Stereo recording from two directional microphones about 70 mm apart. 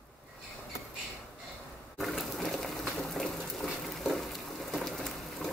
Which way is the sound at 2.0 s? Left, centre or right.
Centre.